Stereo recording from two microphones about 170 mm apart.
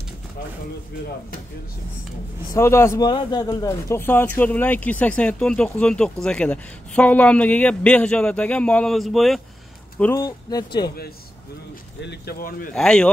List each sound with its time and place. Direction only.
2.5 s speech: 15° left (ahead or behind)
10.2 s speech: 25° left (ahead or behind)
12.0 s speech: 75° left (ahead or behind); by 12.7 s 60° left (ahead or behind)
12.7 s speech: 5° left (ahead or behind)